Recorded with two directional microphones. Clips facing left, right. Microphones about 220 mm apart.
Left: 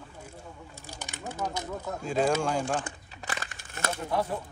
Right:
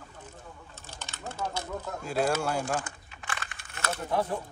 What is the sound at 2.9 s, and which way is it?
Crumpling, 35° left (ahead or behind).